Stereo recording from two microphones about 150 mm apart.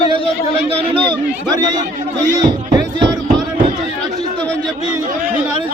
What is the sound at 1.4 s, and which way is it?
Speech, 25° right (ahead or behind).